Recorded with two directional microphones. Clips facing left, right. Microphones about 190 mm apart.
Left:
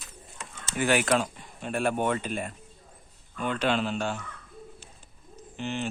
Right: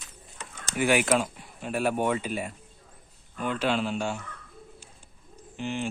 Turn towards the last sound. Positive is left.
turn(degrees=-10)  # may be behind; listen again after turning